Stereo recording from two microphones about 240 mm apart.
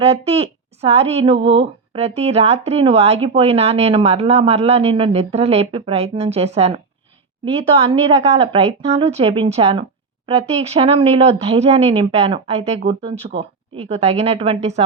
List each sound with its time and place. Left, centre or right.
0.0 s speech: right